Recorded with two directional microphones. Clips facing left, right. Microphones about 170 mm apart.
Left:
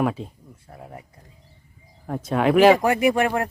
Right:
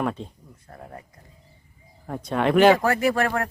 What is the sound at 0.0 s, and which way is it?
Speech, 5° left (ahead or behind).